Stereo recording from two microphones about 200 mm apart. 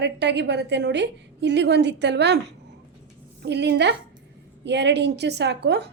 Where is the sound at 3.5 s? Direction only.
60° right (ahead or behind).